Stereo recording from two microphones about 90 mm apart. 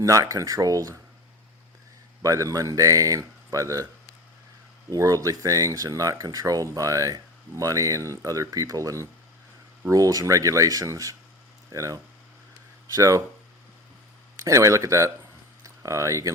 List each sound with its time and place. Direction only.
0.0 s speech: 40° right (ahead or behind)
2.2 s speech: 40° right (ahead or behind)
4.9 s speech: 40° right (ahead or behind)
14.3 s speech: 35° right (ahead or behind)